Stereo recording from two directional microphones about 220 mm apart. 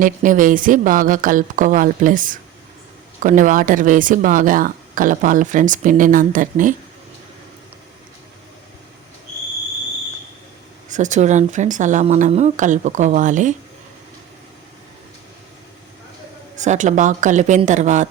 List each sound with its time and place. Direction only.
0.0 s speech: 35° right (ahead or behind)
10.8 s speech: 35° right (ahead or behind)
16.6 s speech: 35° right (ahead or behind)